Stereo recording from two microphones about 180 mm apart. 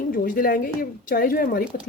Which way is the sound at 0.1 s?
50° left (ahead or behind).